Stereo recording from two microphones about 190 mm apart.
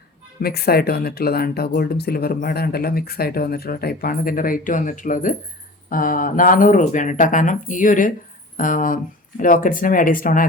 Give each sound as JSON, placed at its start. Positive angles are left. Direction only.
{"t": 0.3, "sound": "speech", "side_deg": 55}